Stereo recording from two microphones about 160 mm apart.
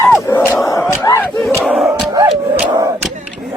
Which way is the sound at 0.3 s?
15° left (ahead or behind).